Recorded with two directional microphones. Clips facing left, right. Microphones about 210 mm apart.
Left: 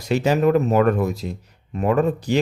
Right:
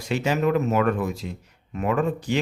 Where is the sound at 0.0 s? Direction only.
40° left (ahead or behind).